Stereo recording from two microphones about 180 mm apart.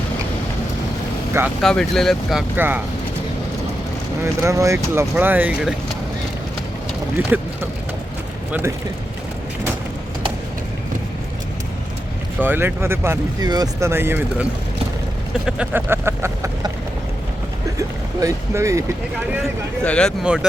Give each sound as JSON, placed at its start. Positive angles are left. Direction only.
{"t": 1.6, "sound": "speech", "side_deg": 5}
{"t": 2.6, "sound": "speech", "side_deg": -10}
{"t": 4.2, "sound": "speech", "side_deg": -15}
{"t": 7.2, "sound": "speech", "side_deg": -10}
{"t": 12.4, "sound": "speech", "side_deg": -10}
{"t": 15.4, "sound": "speech", "side_deg": -10}
{"t": 17.7, "sound": "speech", "side_deg": -20}
{"t": 19.8, "sound": "speech", "side_deg": 5}
{"t": 20.2, "sound": "speech", "side_deg": -5}